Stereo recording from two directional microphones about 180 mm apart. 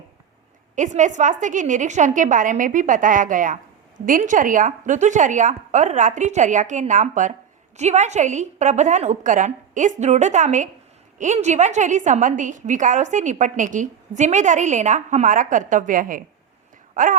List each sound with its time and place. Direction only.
0.8 s a woman's voice: 45° right (ahead or behind)